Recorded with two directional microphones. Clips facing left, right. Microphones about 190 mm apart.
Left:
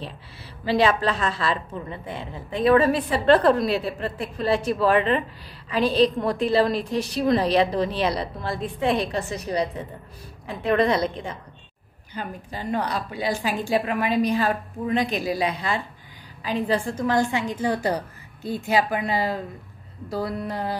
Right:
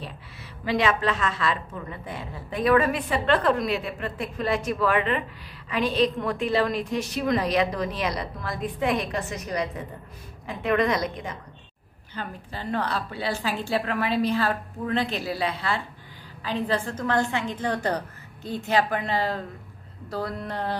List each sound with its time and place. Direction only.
0.7 s a woman's voice: 35° left (ahead or behind)
12.1 s a woman's voice: 15° left (ahead or behind)